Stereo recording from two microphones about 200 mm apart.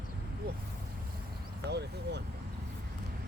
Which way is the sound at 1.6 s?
55° right (ahead or behind).